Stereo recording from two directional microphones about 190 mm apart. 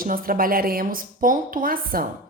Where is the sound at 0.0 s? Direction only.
50° right (ahead or behind).